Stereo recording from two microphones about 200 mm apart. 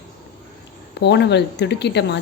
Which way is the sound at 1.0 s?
60° left (ahead or behind).